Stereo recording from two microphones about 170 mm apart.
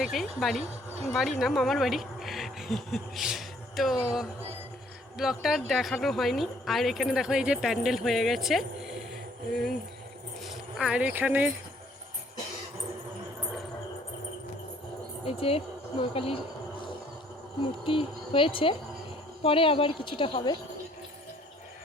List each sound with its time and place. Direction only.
0.0 s speech: centre (ahead or behind)
15.2 s a woman's voice: 35° left (ahead or behind)
17.6 s speech: 30° left (ahead or behind)